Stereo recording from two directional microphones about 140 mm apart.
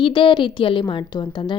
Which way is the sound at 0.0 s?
35° left (ahead or behind).